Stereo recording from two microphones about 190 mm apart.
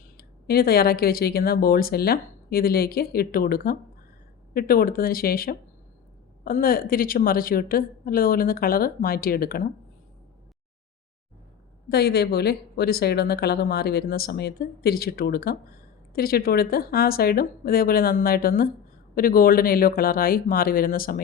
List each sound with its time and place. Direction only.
0.2 s speech: 55° left (ahead or behind)
11.9 s a woman's voice: 55° left (ahead or behind)